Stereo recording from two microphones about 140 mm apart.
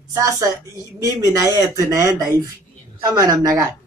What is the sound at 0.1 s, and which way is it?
Speech, 25° right (ahead or behind).